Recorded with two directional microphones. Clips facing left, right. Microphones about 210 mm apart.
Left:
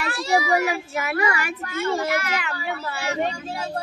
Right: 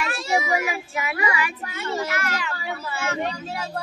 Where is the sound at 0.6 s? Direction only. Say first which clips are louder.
Left 3 dB; 40° left (ahead or behind); by 2.5 s 60° left (ahead or behind).